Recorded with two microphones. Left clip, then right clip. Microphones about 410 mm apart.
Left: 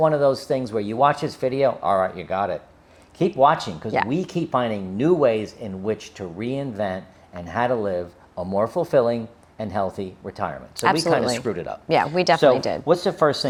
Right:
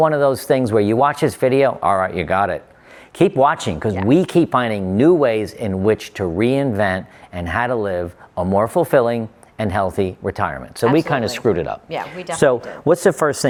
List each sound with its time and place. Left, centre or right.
0.0 s speech: right
12.1 s speech: left
12.8 s speech: right